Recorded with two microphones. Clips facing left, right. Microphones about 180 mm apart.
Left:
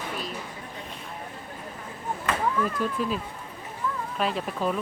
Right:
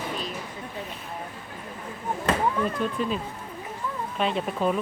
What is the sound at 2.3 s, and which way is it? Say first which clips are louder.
Speech: right 2 dB; 25° right (ahead or behind).